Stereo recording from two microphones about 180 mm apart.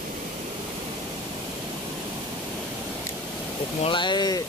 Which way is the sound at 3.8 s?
25° left (ahead or behind).